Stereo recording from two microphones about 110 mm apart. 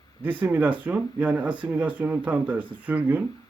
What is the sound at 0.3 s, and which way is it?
Speech, 20° right (ahead or behind).